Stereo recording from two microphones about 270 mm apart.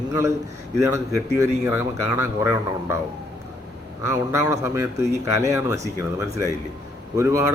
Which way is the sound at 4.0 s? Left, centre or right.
Centre.